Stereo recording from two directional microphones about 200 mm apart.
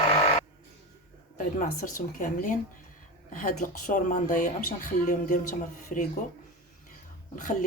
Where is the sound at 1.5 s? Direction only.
40° left (ahead or behind).